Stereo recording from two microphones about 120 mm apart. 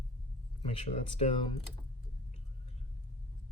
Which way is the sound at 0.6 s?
55° left (ahead or behind).